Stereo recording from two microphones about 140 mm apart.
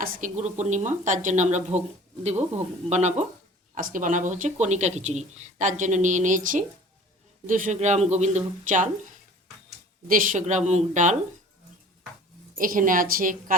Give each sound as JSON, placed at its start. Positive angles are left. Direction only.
{"t": 0.0, "sound": "speech", "side_deg": -85}
{"t": 0.3, "sound": "speech", "side_deg": -55}
{"t": 3.8, "sound": "speech", "side_deg": -75}
{"t": 10.1, "sound": "speech", "side_deg": -70}
{"t": 12.5, "sound": "a woman's voice", "side_deg": -80}